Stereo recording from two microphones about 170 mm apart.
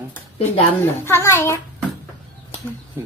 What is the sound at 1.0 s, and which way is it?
Speech, 15° left (ahead or behind).